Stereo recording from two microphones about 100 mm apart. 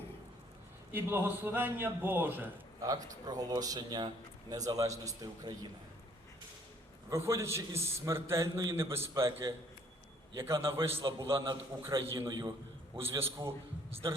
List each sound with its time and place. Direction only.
0.9 s a man's voice: 20° right (ahead or behind)
2.8 s a man's voice: 40° right (ahead or behind)
7.1 s a man's voice: 30° right (ahead or behind)
11.0 s a man's voice: 45° right (ahead or behind)
11.3 s a man's voice: 55° right (ahead or behind)
11.9 s a man's voice: 30° right (ahead or behind)
12.3 s a man's voice: 45° right (ahead or behind)
13.1 s a man's voice: 25° right (ahead or behind)